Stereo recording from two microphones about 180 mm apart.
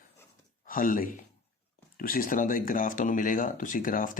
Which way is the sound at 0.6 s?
50° left (ahead or behind).